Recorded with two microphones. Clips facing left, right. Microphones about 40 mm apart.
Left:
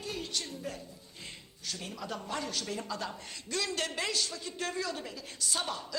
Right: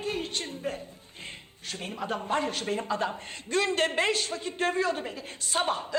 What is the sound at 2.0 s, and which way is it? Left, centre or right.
Speech, right.